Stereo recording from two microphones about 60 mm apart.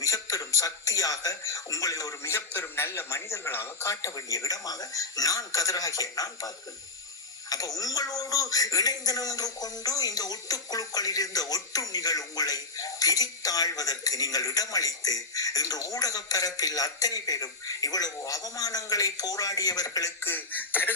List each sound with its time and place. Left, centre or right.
0.0 s speech: left
2.3 s a man's voice: left
3.8 s speech: left
7.8 s speech: left
20.2 s speech: left